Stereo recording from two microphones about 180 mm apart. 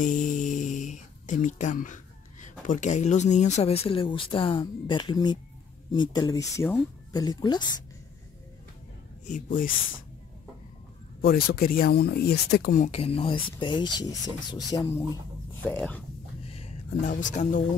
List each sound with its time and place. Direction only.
0.0 s a sound: 45° left (ahead or behind)
2.4 s speech: 45° left (ahead or behind); by 7.6 s 25° left (ahead or behind)
9.2 s speech: 45° left (ahead or behind)
11.1 s speech: 55° left (ahead or behind)
12.8 s speech: 35° left (ahead or behind)
15.6 s speech: 10° left (ahead or behind)
16.4 s a sound: 35° left (ahead or behind)
17.1 s speech: 45° left (ahead or behind)